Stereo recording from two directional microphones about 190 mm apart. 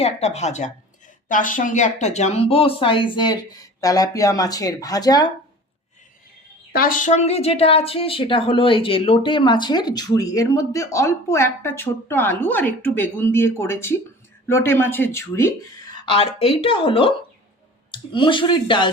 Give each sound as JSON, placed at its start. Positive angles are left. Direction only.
{"t": 0.0, "sound": "speech", "side_deg": 35}
{"t": 6.7, "sound": "a woman's voice", "side_deg": 45}
{"t": 16.0, "sound": "speech", "side_deg": 30}